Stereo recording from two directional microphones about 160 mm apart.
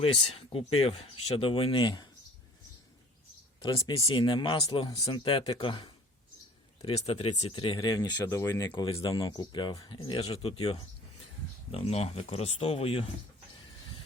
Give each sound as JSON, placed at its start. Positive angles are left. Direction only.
{"t": 0.0, "sound": "speech", "side_deg": 35}
{"t": 3.6, "sound": "speech", "side_deg": 25}
{"t": 11.7, "sound": "speech", "side_deg": 40}